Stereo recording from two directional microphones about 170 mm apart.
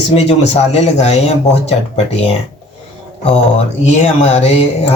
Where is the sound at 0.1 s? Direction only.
35° left (ahead or behind).